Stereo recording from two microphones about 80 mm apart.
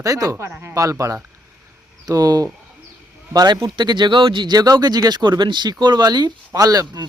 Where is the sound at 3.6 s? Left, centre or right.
Right.